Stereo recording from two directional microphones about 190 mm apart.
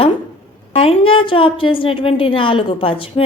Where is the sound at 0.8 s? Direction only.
30° left (ahead or behind).